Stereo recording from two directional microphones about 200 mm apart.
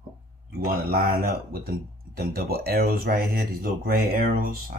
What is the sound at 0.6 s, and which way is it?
Speech, 50° right (ahead or behind).